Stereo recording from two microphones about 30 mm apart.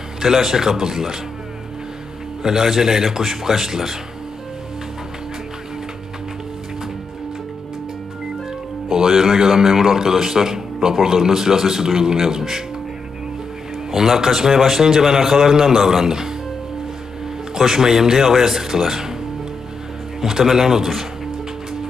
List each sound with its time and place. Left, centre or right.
0.2 s a man's voice: centre
2.4 s a man's voice: centre
8.9 s a man's voice: centre
13.9 s a man's voice: centre
16.0 s speech: centre
17.6 s a man's voice: centre
20.4 s a man's voice: centre